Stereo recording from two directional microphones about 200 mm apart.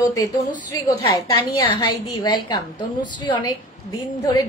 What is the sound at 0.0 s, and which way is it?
A woman's voice, 15° left (ahead or behind).